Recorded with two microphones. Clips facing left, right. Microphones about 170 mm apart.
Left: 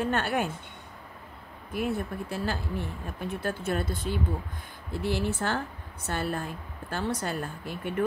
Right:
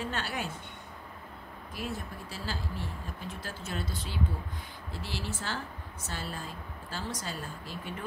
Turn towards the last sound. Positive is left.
turn(degrees=60)  # may be behind; listen again after turning